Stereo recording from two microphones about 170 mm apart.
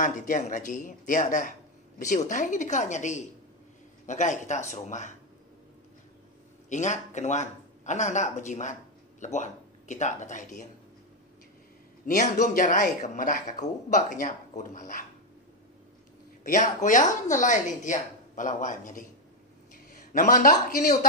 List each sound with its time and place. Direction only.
0.0 s speech: 50° left (ahead or behind)
6.7 s speech: 45° left (ahead or behind)
12.2 s speech: 45° left (ahead or behind)
16.4 s a man's voice: 50° left (ahead or behind)